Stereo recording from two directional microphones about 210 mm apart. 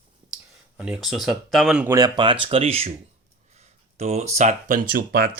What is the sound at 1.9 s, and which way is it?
Speech, 20° right (ahead or behind).